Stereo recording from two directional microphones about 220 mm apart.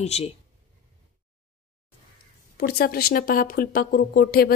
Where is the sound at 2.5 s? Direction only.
45° left (ahead or behind).